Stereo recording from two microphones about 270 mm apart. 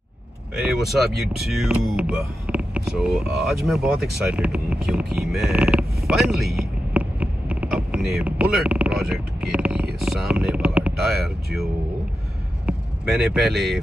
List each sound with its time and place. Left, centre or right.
0.6 s speech: centre